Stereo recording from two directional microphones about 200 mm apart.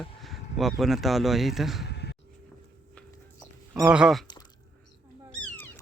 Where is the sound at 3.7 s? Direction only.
5° right (ahead or behind).